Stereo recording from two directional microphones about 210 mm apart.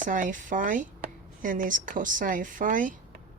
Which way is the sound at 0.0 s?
40° right (ahead or behind).